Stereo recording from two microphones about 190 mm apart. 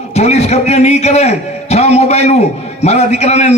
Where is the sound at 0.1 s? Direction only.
35° left (ahead or behind).